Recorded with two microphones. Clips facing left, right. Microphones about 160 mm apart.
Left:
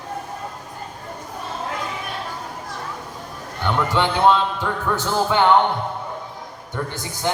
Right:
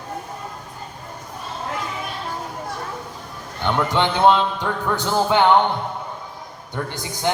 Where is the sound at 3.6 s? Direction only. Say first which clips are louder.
Even; 20° right (ahead or behind).